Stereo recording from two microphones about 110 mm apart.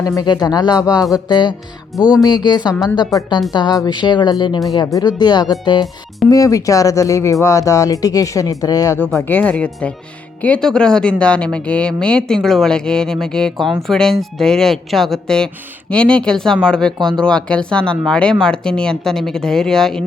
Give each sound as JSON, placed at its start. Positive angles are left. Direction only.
{"t": 0.2, "sound": "a woman's voice", "side_deg": 35}
{"t": 6.3, "sound": "speech", "side_deg": 30}
{"t": 9.1, "sound": "speech", "side_deg": 15}